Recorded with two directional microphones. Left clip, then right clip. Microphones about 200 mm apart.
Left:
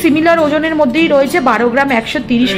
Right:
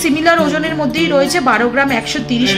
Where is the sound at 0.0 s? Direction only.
45° left (ahead or behind).